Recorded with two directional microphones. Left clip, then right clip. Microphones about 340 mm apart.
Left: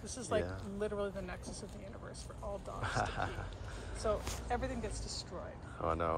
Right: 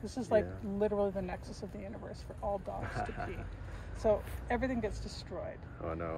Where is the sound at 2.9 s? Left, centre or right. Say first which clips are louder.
Left 6 dB; centre.